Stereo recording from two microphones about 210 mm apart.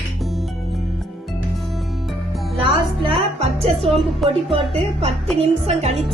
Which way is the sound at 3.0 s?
25° right (ahead or behind).